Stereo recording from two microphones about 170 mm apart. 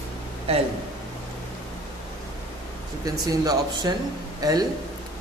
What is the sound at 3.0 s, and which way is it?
Speech, 20° right (ahead or behind).